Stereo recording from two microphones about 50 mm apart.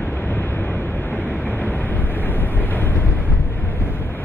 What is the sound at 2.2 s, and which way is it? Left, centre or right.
Vehicle, left.